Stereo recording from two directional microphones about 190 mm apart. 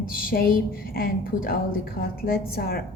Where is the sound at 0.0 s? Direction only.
50° left (ahead or behind).